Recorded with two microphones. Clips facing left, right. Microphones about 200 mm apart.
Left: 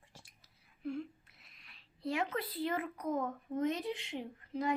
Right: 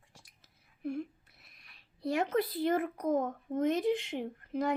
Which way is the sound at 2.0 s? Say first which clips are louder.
Right 6 dB; 45° right (ahead or behind).